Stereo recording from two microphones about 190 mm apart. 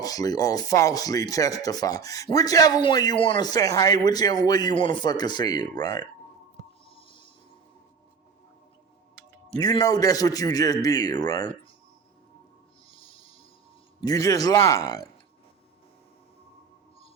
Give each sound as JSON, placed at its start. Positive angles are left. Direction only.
{"t": 0.0, "sound": "speech", "side_deg": 20}
{"t": 6.9, "sound": "music", "side_deg": 25}
{"t": 9.6, "sound": "speech", "side_deg": 20}
{"t": 12.9, "sound": "music", "side_deg": 30}
{"t": 14.0, "sound": "speech", "side_deg": 20}